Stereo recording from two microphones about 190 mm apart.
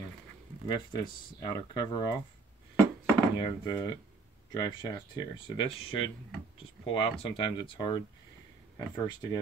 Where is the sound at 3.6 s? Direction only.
20° left (ahead or behind).